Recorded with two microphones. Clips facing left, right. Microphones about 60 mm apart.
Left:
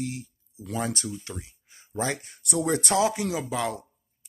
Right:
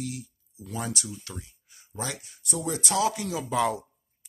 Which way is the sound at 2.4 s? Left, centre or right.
Left.